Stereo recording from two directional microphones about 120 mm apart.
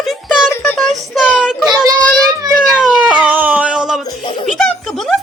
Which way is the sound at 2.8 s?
10° right (ahead or behind).